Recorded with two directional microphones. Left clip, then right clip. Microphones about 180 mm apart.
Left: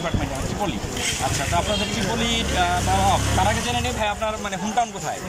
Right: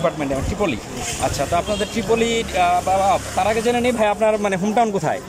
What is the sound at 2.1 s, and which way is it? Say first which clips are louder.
Speech: right 6 dB; 25° right (ahead or behind).